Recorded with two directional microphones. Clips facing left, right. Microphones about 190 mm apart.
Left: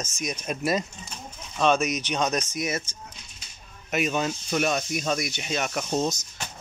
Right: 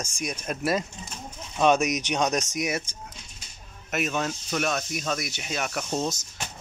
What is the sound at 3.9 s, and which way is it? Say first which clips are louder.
Speech: left 2 dB; centre (ahead or behind).